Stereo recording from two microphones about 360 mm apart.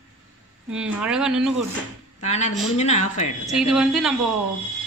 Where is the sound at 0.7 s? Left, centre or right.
Centre.